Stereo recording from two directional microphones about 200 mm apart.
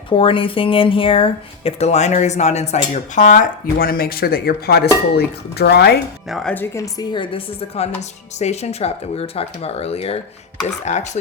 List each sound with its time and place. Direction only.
0.1 s speech: 25° left (ahead or behind); by 6.0 s 55° left (ahead or behind)
6.2 s speech: centre (ahead or behind); by 11.2 s 35° left (ahead or behind)